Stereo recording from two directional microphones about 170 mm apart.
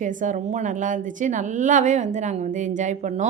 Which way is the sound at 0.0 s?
50° right (ahead or behind).